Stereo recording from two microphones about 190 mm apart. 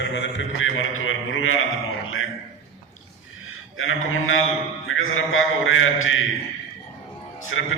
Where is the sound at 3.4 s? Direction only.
90° left.